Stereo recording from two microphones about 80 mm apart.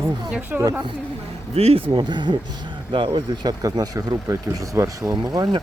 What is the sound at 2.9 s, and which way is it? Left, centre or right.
Speech, right.